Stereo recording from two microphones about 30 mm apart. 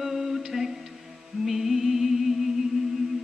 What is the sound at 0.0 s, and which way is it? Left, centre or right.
Music, centre.